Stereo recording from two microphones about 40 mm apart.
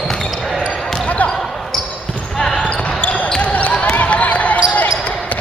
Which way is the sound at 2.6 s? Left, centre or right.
Left.